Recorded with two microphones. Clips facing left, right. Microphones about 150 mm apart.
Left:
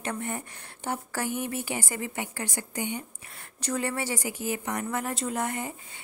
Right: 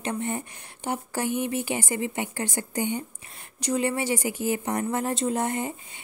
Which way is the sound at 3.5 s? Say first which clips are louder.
Right 4 dB; 15° right (ahead or behind).